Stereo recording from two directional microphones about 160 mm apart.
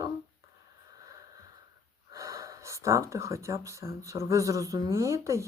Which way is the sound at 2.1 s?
20° right (ahead or behind).